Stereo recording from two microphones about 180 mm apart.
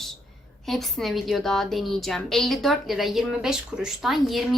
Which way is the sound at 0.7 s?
Centre (ahead or behind).